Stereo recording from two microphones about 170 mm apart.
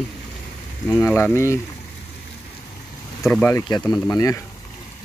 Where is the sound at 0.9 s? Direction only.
5° left (ahead or behind).